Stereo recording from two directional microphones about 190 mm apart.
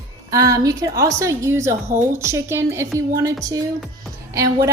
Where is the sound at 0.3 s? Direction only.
15° right (ahead or behind).